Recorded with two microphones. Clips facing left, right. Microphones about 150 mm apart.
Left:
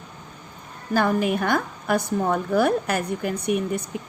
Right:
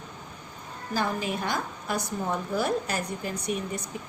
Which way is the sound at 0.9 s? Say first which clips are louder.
Left 8 dB; 60° left (ahead or behind).